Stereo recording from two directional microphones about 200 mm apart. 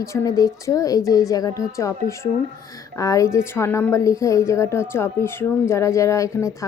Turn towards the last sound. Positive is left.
turn(degrees=15)  # may be behind; listen again after turning